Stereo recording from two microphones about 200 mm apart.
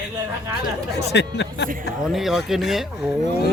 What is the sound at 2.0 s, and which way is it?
Speech, centre (ahead or behind).